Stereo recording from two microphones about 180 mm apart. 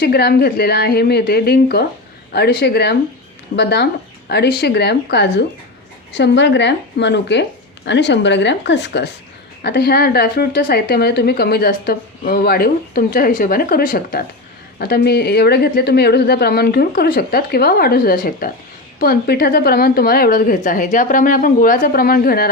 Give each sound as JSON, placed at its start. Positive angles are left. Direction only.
{"t": 0.0, "sound": "a woman's voice", "side_deg": 60}
{"t": 9.6, "sound": "a woman's voice", "side_deg": 60}